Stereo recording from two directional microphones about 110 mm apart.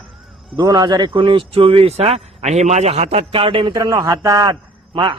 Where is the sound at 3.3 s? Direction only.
55° right (ahead or behind).